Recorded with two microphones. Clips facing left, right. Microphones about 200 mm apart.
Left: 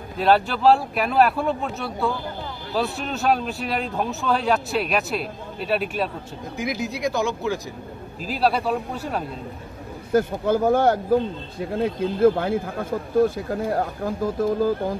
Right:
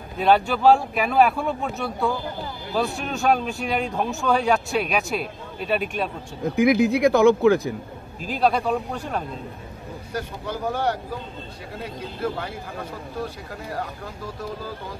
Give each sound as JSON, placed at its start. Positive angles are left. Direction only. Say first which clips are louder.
{"t": 0.2, "sound": "speech", "louder": "even", "side_deg": 0}
{"t": 6.5, "sound": "speech", "louder": "right 10 dB", "side_deg": -60}
{"t": 8.3, "sound": "speech", "louder": "even", "side_deg": 5}
{"t": 10.1, "sound": "speech", "louder": "left 11 dB", "side_deg": 50}